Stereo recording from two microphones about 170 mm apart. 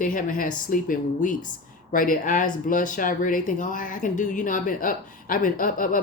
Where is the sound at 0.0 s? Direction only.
50° left (ahead or behind).